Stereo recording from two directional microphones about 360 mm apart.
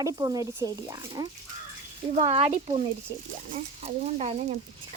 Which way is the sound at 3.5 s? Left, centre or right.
Centre.